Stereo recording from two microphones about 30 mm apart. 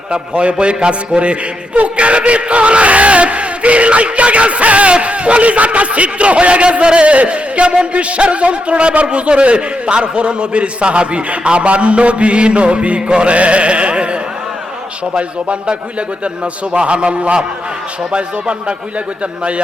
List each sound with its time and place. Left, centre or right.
0.1 s a man's voice: right
2.0 s a sound: right
7.3 s a man's voice: right
13.0 s music: right
13.2 s a sound: right
15.1 s a man's voice: right